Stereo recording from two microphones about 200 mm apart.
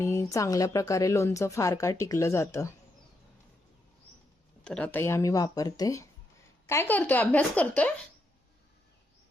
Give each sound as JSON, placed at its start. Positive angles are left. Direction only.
{"t": 0.0, "sound": "speech", "side_deg": 15}
{"t": 4.6, "sound": "speech", "side_deg": 5}